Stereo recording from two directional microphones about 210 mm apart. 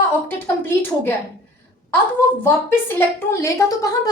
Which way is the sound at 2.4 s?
10° left (ahead or behind).